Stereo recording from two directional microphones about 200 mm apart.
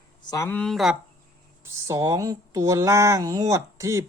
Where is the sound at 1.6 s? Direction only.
15° right (ahead or behind).